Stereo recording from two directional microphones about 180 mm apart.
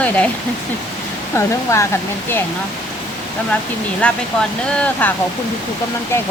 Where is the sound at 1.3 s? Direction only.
15° left (ahead or behind).